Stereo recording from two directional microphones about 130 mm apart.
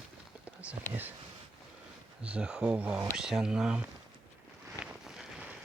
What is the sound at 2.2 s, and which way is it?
Speech, 10° right (ahead or behind).